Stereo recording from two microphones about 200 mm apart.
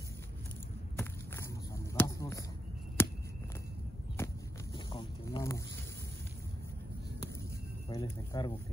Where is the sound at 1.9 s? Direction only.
15° left (ahead or behind).